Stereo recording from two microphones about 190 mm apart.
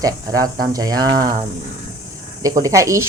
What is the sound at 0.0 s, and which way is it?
Speech, 20° right (ahead or behind).